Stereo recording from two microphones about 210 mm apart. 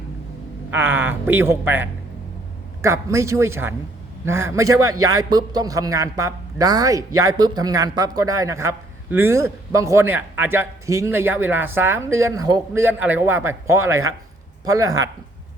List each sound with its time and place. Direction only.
0.7 s a man's voice: 10° right (ahead or behind)